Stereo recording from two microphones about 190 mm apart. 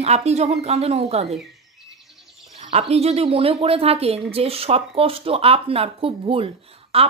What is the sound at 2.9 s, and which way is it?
Speech, 35° right (ahead or behind).